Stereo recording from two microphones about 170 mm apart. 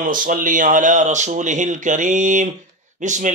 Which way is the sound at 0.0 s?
55° right (ahead or behind).